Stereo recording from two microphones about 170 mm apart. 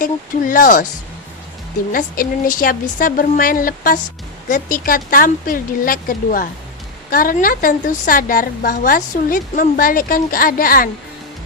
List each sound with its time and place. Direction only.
0.0 s speech: 55° left (ahead or behind)
1.9 s a woman's voice: 55° left (ahead or behind)